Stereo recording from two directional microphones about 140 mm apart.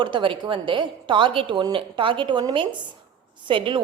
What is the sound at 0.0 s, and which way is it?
A woman's voice, 35° right (ahead or behind).